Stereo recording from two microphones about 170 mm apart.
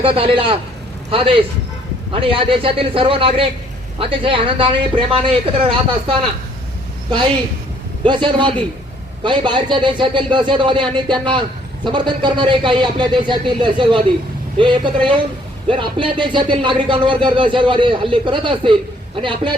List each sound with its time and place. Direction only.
0.0 s a man's voice: 30° right (ahead or behind)
8.0 s a man's voice: 25° right (ahead or behind)